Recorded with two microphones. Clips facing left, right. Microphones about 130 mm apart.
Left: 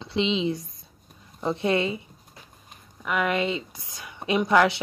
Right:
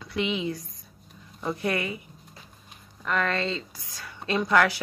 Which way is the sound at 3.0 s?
10° left (ahead or behind).